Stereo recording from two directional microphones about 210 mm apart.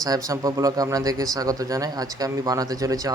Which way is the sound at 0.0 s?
15° right (ahead or behind).